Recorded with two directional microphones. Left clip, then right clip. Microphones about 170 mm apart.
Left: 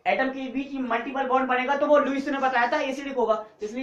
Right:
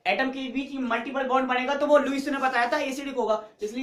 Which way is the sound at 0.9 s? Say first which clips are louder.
Left 1 dB; 20° right (ahead or behind).